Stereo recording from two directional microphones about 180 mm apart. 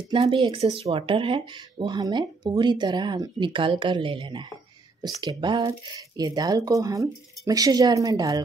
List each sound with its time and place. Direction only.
0.1 s speech: 30° right (ahead or behind)